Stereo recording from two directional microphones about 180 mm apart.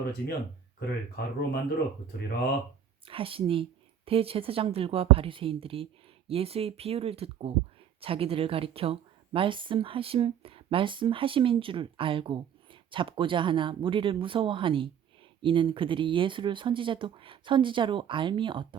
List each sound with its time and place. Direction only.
0.0 s speech: 60° left (ahead or behind)
3.1 s a woman's voice: 30° right (ahead or behind)